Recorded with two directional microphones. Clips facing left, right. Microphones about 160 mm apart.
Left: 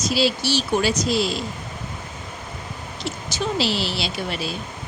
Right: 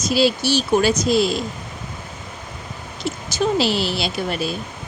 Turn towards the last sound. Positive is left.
turn(degrees=-50)  # may be behind; listen again after turning